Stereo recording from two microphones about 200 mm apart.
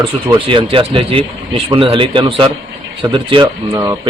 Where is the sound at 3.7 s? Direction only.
15° right (ahead or behind).